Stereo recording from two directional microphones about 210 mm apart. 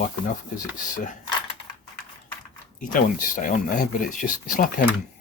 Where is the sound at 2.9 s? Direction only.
40° left (ahead or behind).